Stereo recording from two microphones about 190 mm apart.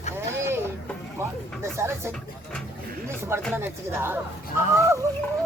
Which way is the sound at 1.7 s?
15° right (ahead or behind).